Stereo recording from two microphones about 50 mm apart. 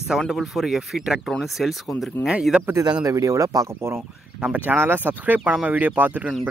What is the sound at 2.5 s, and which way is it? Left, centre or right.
Speech, right.